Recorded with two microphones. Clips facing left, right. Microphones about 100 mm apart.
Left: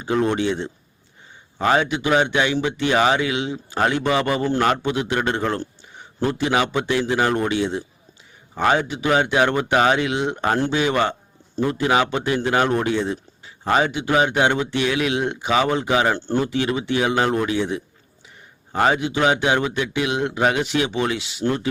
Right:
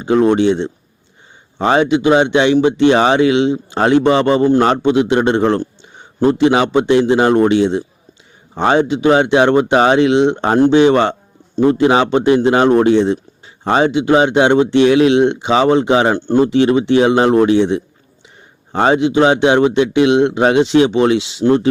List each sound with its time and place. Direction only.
0.0 s speech: 20° right (ahead or behind)